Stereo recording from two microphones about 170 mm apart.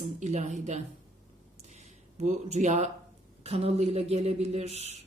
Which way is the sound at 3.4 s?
35° right (ahead or behind).